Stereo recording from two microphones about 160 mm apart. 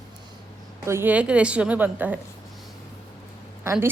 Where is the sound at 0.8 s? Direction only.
15° right (ahead or behind).